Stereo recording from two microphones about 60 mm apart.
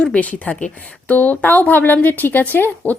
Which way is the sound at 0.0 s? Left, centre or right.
Left.